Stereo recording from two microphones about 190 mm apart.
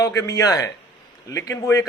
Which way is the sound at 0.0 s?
20° left (ahead or behind).